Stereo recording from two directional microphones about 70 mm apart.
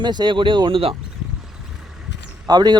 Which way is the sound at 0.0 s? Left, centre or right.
Right.